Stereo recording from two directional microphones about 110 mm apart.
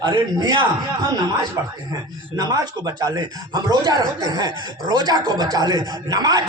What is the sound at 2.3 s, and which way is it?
Speech, 35° right (ahead or behind).